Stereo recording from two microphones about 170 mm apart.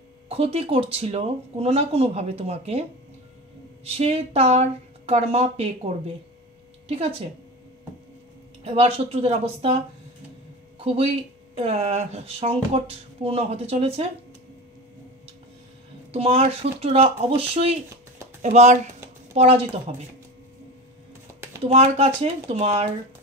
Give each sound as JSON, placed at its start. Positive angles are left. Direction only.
{"t": 0.3, "sound": "speech", "side_deg": -35}
{"t": 3.8, "sound": "speech", "side_deg": -35}
{"t": 8.6, "sound": "speech", "side_deg": -35}
{"t": 10.8, "sound": "speech", "side_deg": -35}
{"t": 16.1, "sound": "speech", "side_deg": -35}
{"t": 21.6, "sound": "speech", "side_deg": -40}